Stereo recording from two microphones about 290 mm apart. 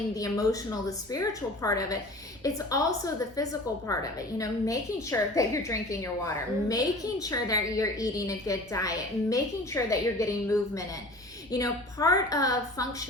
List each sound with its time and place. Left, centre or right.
0.1 s a woman's voice: centre